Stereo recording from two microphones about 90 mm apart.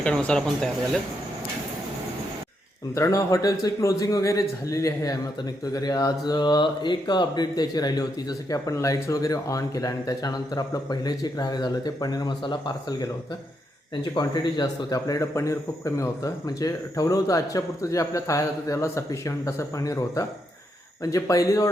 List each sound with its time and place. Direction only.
0.0 s speech: 10° left (ahead or behind)
2.9 s a man's voice: 35° left (ahead or behind); by 13.1 s 55° left (ahead or behind)
14.2 s a man's voice: 55° left (ahead or behind)